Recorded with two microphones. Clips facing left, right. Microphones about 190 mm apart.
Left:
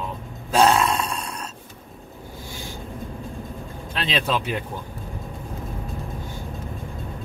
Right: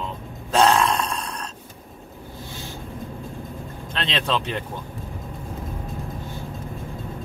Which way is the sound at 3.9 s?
10° left (ahead or behind).